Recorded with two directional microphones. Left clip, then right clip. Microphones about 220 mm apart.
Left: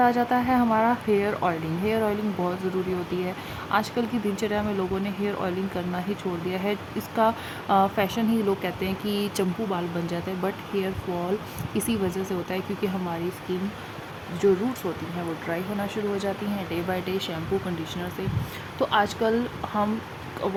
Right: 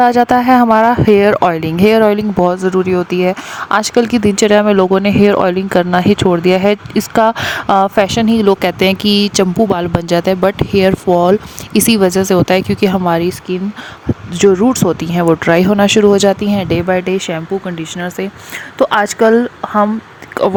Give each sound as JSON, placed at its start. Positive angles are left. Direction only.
{"t": 0.0, "sound": "a woman's voice", "side_deg": -45}
{"t": 14.3, "sound": "a woman's voice", "side_deg": -45}
{"t": 18.8, "sound": "a woman's voice", "side_deg": -40}